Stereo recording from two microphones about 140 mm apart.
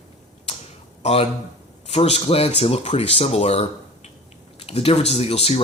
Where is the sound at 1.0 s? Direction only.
45° left (ahead or behind).